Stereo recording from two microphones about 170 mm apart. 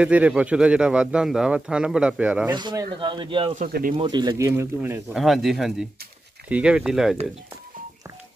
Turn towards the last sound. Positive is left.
turn(degrees=-5)  # may be behind; listen again after turning